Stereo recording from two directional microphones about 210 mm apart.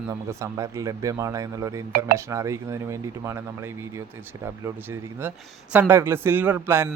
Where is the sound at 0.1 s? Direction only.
15° right (ahead or behind).